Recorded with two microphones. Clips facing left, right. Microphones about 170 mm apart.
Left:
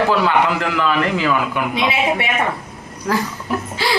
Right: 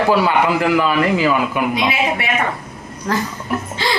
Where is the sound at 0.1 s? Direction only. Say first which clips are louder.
Right 1 dB; 10° right (ahead or behind).